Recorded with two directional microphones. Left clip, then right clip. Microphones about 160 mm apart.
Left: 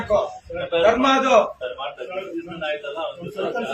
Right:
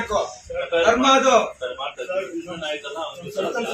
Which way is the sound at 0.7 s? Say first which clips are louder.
Right 1 dB; 10° left (ahead or behind).